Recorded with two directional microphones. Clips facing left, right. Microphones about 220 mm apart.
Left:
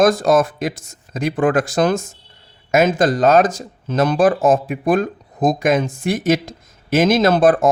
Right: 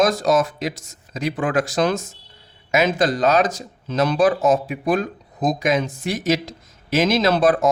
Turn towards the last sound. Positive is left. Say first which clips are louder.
# left 3 dB
turn(degrees=50)  # may be behind; listen again after turning